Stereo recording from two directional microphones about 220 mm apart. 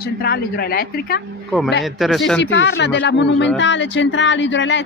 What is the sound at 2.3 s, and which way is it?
A woman's voice, 55° left (ahead or behind).